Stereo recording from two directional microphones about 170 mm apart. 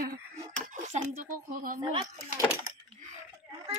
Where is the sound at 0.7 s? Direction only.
45° right (ahead or behind).